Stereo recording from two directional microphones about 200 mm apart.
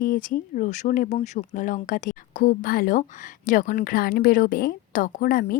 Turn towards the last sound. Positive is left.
turn(degrees=50)  # may be behind; listen again after turning